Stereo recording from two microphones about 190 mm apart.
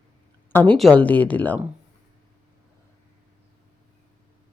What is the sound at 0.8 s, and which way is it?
Speech, 5° left (ahead or behind).